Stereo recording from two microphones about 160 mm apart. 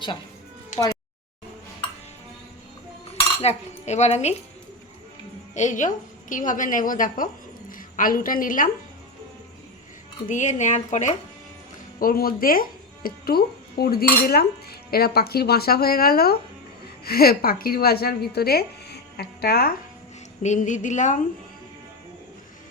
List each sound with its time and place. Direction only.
3.4 s speech: 45° left (ahead or behind)
5.5 s a woman's voice: 50° left (ahead or behind)
10.2 s speech: 50° left (ahead or behind)
11.9 s speech: 65° left (ahead or behind)
20.4 s speech: 50° left (ahead or behind)